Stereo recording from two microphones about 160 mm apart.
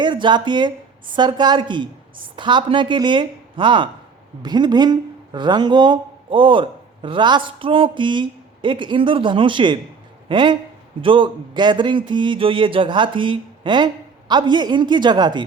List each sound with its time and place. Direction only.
0.0 s speech: 30° right (ahead or behind)